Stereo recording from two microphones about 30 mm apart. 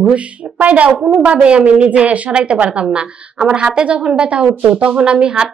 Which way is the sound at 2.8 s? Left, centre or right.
Right.